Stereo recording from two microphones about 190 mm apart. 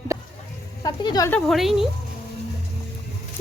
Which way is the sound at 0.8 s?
20° left (ahead or behind).